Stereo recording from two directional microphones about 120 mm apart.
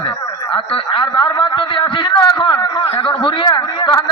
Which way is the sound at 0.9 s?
45° left (ahead or behind).